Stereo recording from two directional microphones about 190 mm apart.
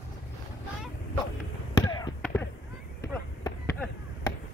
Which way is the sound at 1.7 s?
20° left (ahead or behind).